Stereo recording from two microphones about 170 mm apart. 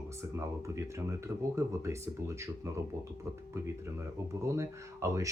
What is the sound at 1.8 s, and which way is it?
Speech, 15° right (ahead or behind).